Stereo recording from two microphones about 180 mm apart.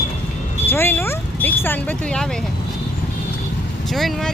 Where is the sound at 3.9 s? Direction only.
Centre (ahead or behind).